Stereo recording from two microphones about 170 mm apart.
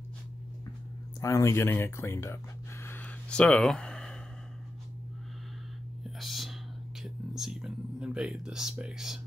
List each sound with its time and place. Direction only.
1.2 s speech: 15° left (ahead or behind)
2.8 s a sound: 10° left (ahead or behind)
6.0 s whispering: centre (ahead or behind)
7.0 s speech: centre (ahead or behind)